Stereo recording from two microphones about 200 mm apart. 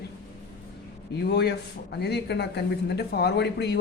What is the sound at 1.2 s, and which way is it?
A man's voice, 55° left (ahead or behind).